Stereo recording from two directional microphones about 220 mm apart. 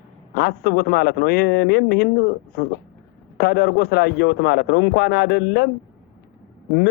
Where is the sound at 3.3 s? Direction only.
45° left (ahead or behind).